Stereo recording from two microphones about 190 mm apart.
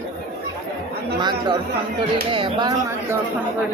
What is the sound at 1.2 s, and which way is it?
Speech, 25° right (ahead or behind).